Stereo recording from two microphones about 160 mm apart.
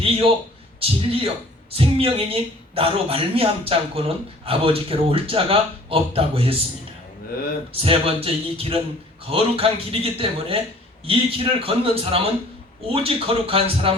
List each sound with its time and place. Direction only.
0.0 s a man's voice: 35° right (ahead or behind)
7.7 s a woman's voice: 35° right (ahead or behind)